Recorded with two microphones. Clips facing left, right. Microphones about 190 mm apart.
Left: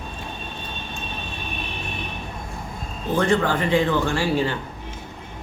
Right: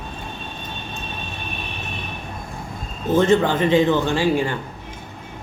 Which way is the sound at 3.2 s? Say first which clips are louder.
Right 4 dB; 20° right (ahead or behind).